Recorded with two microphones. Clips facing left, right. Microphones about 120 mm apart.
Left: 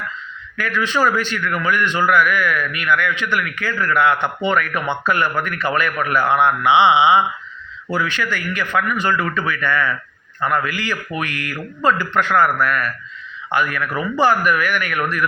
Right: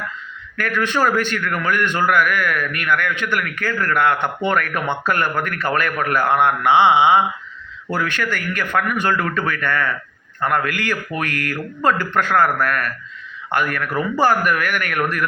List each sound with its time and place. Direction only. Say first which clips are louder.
0.5 s a man's voice: even; 55° right (ahead or behind)